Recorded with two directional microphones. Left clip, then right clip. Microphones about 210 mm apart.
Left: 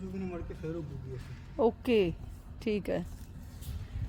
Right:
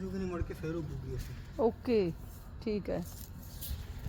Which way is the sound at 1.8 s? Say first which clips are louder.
Left 3 dB; 30° left (ahead or behind).